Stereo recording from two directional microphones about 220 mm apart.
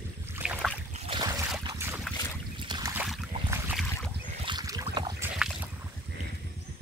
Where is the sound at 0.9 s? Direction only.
25° right (ahead or behind).